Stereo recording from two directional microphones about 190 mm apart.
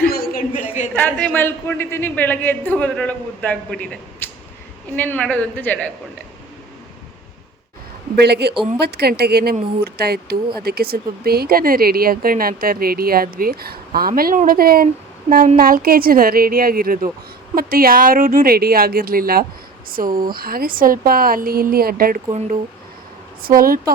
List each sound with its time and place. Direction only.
0.0 s a sound: 50° left (ahead or behind)
0.9 s a man's voice: 5° left (ahead or behind)
4.9 s a man's voice: 10° left (ahead or behind)
8.1 s a woman's voice: 60° right (ahead or behind)
22.3 s speech: 30° right (ahead or behind)
23.4 s speech: 50° right (ahead or behind)